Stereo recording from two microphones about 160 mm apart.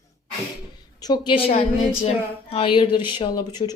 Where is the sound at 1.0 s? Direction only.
25° left (ahead or behind).